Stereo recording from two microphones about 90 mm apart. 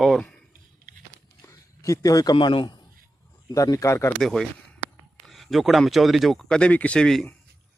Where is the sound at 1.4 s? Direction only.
35° left (ahead or behind).